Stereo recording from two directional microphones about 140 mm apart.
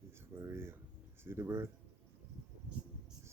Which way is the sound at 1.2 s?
20° right (ahead or behind).